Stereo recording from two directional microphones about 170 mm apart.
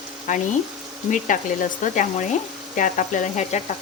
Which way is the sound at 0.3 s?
50° left (ahead or behind).